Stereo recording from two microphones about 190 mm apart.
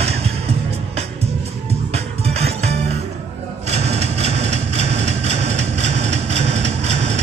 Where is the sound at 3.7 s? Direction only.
35° right (ahead or behind).